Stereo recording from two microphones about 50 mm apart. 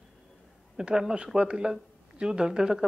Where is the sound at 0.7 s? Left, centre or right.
Centre.